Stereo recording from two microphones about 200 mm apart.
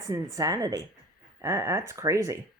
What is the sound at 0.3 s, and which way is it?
Speech, 20° right (ahead or behind).